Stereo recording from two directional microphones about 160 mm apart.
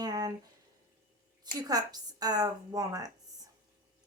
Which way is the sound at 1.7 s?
25° right (ahead or behind).